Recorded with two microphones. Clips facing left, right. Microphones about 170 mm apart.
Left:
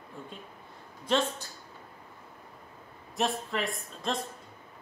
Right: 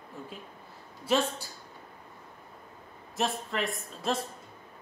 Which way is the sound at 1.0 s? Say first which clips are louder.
Right 1 dB; 5° right (ahead or behind).